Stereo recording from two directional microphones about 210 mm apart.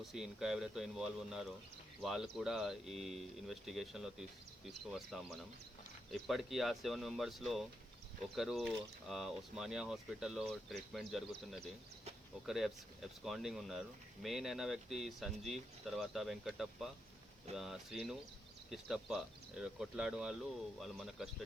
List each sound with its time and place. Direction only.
0.0 s speech: centre (ahead or behind)
12.5 s speech: centre (ahead or behind)
17.5 s speech: 30° right (ahead or behind)
18.7 s speech: centre (ahead or behind)